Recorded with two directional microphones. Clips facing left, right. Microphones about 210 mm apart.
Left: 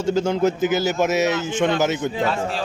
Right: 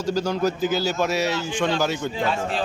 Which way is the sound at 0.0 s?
25° left (ahead or behind).